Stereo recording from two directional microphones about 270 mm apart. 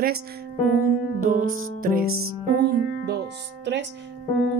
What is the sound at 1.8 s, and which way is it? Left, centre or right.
Music, right.